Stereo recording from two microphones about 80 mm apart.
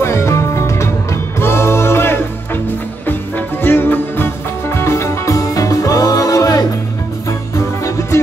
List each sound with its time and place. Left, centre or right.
0.0 s music: left
8.1 s music: left